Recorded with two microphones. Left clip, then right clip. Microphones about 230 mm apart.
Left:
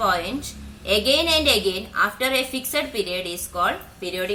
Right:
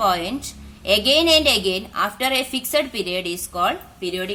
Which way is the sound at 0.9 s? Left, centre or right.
Right.